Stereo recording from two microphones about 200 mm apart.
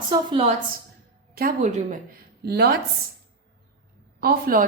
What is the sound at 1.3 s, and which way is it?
A woman's voice, 45° right (ahead or behind).